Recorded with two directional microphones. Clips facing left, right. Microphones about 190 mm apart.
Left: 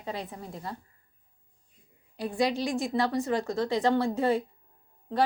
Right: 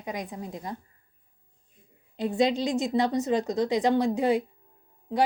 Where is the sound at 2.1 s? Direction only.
20° right (ahead or behind).